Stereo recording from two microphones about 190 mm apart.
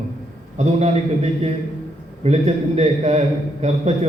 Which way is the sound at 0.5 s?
35° right (ahead or behind).